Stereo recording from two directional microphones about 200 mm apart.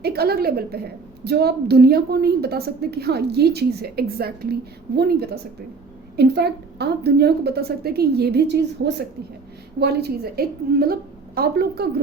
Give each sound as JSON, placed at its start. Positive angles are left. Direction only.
{"t": 0.0, "sound": "a woman's voice", "side_deg": -50}